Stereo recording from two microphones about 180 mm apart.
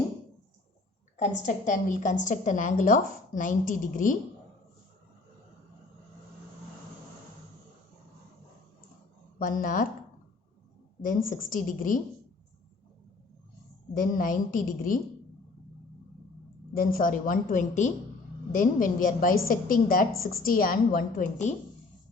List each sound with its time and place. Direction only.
1.1 s a woman's voice: 45° left (ahead or behind)
9.4 s a woman's voice: 50° left (ahead or behind)
11.3 s a woman's voice: 50° left (ahead or behind)
13.9 s a woman's voice: 50° left (ahead or behind)
16.7 s a woman's voice: 50° left (ahead or behind)